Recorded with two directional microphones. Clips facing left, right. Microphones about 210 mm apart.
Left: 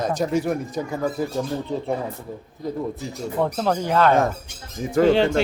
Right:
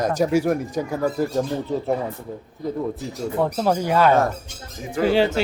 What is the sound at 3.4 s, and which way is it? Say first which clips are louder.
Speech: right 1 dB; 5° right (ahead or behind).